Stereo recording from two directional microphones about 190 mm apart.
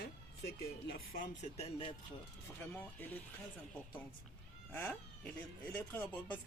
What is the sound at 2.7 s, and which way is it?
Speech, 10° left (ahead or behind).